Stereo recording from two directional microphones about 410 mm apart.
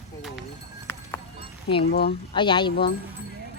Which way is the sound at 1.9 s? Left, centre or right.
Left.